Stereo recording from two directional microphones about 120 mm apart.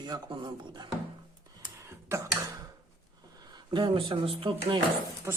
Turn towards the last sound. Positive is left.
turn(degrees=-25)  # may be behind; listen again after turning